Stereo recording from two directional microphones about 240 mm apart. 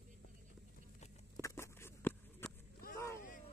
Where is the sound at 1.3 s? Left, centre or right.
Centre.